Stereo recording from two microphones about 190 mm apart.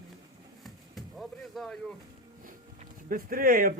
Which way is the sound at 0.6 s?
Centre (ahead or behind).